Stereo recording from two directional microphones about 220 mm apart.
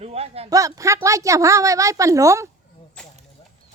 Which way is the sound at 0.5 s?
15° right (ahead or behind).